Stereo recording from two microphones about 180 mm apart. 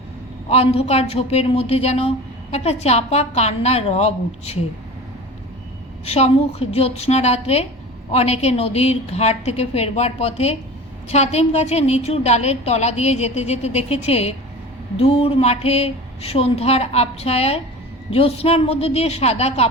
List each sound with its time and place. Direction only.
0.5 s a woman's voice: 35° left (ahead or behind)
6.1 s a woman's voice: 35° left (ahead or behind)